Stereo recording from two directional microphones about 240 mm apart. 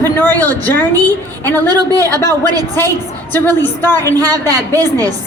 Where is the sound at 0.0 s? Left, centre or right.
Centre.